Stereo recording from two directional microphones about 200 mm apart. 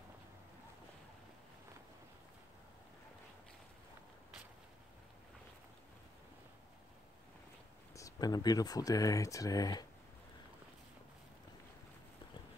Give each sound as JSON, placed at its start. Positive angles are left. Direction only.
{"t": 7.9, "sound": "speech", "side_deg": 15}